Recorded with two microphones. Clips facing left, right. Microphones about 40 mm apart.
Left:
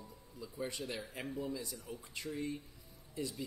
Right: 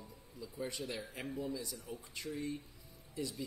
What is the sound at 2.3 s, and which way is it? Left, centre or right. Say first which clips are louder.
Speech: even; left.